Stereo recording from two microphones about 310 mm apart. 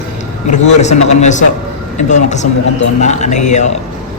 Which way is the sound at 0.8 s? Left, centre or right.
Left.